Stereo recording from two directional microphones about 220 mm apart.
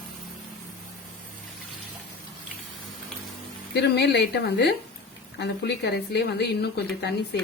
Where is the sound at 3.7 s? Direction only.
50° left (ahead or behind).